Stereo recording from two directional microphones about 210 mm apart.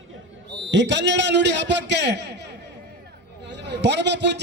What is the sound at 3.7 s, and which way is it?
Speech, 55° right (ahead or behind).